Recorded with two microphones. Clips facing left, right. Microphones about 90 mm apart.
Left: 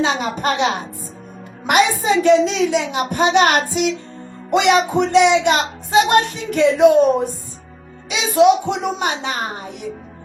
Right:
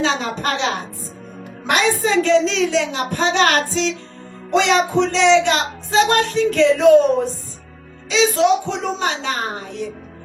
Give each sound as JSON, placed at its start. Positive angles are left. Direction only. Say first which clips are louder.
{"t": 0.0, "sound": "speech", "louder": "left 1 dB", "side_deg": 20}